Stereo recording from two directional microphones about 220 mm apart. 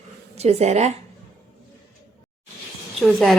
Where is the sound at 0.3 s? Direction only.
30° right (ahead or behind).